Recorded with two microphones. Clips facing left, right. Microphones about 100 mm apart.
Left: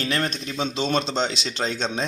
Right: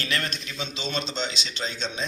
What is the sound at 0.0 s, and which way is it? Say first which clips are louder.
Speech: left 5 dB; 30° left (ahead or behind).